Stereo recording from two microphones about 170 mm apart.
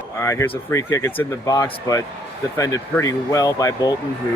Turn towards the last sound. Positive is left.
turn(degrees=20)  # may be behind; listen again after turning